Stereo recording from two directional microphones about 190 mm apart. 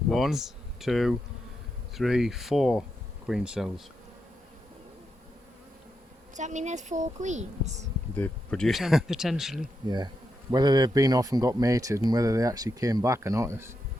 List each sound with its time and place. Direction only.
0.1 s speech: centre (ahead or behind)
6.3 s speech: 40° right (ahead or behind)
8.1 s speech: 5° left (ahead or behind)
10.5 s speech: 20° right (ahead or behind)